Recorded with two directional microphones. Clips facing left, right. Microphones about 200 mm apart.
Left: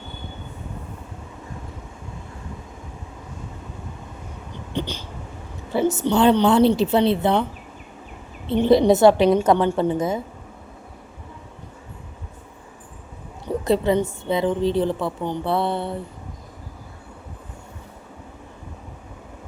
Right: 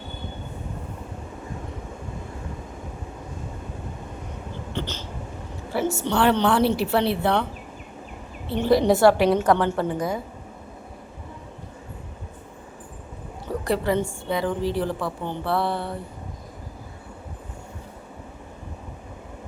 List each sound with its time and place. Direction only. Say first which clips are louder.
4.7 s a sound: left 4 dB; 15° left (ahead or behind)
5.7 s a woman's voice: left 4 dB; 20° left (ahead or behind)
8.4 s a woman's voice: left 4 dB; 20° left (ahead or behind)
13.5 s a woman's voice: left 4 dB; 20° left (ahead or behind)